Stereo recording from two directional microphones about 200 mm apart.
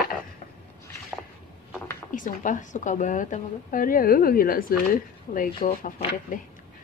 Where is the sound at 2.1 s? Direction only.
40° left (ahead or behind).